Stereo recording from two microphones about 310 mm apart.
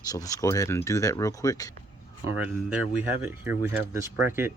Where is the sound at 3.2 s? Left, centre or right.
Centre.